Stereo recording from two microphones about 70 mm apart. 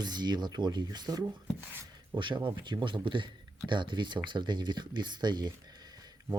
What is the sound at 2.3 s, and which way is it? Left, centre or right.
Speech, right.